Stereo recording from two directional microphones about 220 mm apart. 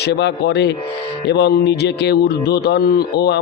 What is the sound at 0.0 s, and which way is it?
A man's voice, 50° left (ahead or behind).